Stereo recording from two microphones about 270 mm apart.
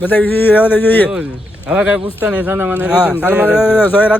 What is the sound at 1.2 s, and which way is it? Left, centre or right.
Speech, centre.